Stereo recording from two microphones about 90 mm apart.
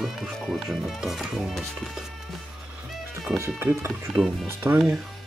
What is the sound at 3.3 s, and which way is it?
Speech, 30° right (ahead or behind).